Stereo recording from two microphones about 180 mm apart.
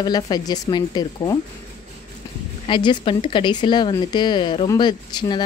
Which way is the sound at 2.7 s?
25° left (ahead or behind).